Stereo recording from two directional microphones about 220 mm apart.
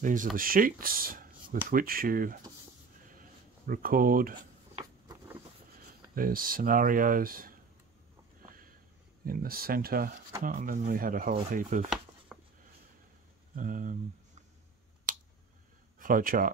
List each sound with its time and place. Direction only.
0.0 s speech: 35° right (ahead or behind)
3.2 s a sound: 40° right (ahead or behind)
6.1 s speech: 40° right (ahead or behind)
9.2 s speech: 40° right (ahead or behind)
12.3 s a sound: centre (ahead or behind)
13.6 s speech: 35° right (ahead or behind)
16.0 s speech: 40° right (ahead or behind)